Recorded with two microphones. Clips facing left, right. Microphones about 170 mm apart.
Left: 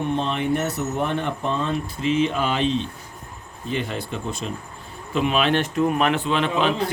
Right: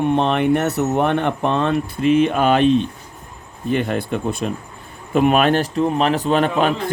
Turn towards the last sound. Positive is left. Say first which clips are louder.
# right 4 dB
turn(degrees=-45)  # may be behind; listen again after turning